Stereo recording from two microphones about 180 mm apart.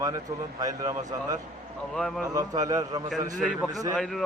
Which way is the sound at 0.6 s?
20° right (ahead or behind).